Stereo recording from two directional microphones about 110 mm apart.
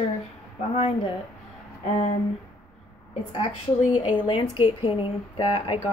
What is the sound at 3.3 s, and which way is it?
A woman's voice, 55° left (ahead or behind).